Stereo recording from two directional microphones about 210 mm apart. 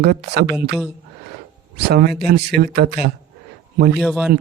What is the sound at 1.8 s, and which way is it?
Speech, 50° right (ahead or behind).